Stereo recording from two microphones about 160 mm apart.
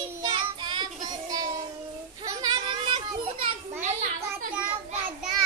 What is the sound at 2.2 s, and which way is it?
Children playing, 25° right (ahead or behind).